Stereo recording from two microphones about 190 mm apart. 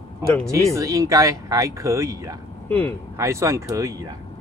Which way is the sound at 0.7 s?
15° right (ahead or behind).